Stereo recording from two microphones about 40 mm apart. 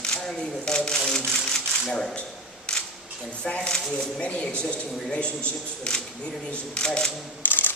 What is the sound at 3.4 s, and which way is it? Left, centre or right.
A man's voice, left.